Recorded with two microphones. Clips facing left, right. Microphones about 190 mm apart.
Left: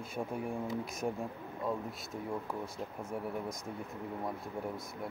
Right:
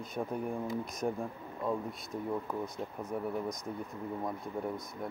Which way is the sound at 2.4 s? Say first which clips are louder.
Right 2 dB; 10° left (ahead or behind).